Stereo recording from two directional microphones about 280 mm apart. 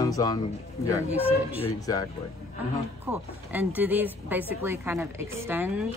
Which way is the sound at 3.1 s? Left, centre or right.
Centre.